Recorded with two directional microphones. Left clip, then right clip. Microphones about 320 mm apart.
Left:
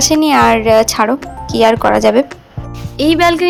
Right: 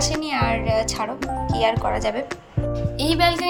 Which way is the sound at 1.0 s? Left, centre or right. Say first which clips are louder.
Left 14 dB; left.